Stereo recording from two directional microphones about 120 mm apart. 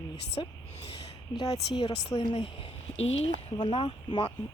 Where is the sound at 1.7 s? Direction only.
40° left (ahead or behind).